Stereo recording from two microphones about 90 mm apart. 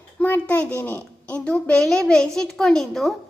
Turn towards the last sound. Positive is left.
turn(degrees=5)  # may be behind; listen again after turning